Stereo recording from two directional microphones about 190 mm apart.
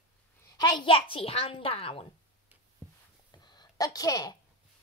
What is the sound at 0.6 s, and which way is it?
A child's voice, 25° left (ahead or behind).